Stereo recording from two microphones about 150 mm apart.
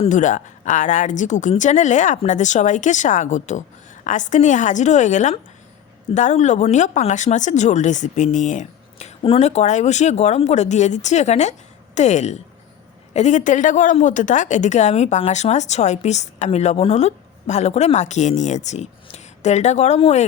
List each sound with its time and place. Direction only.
0.0 s a woman's voice: 55° left (ahead or behind)